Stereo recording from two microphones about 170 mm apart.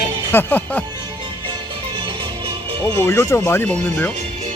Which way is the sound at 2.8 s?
15° left (ahead or behind).